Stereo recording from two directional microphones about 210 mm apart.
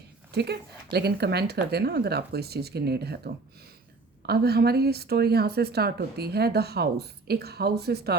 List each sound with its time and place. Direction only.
0.3 s speech: 50° right (ahead or behind)